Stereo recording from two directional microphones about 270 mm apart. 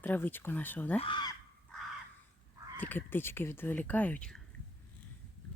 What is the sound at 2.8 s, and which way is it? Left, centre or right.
Speech, centre.